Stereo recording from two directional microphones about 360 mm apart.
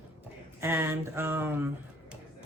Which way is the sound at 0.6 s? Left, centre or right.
Centre.